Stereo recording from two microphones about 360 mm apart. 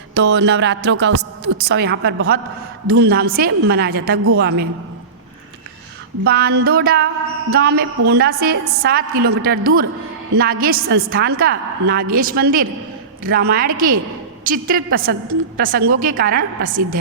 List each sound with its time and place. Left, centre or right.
0.1 s a woman's voice: right
6.2 s a woman's voice: right